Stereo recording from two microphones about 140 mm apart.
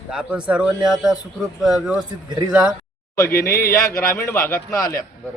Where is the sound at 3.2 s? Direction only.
90° left.